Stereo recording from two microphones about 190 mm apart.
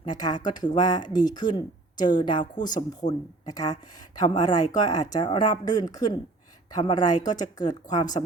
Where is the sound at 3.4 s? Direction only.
20° left (ahead or behind).